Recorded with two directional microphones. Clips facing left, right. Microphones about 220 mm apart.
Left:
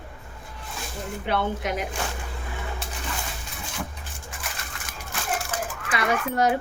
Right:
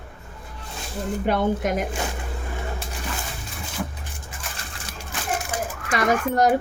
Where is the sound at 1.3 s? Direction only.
45° right (ahead or behind).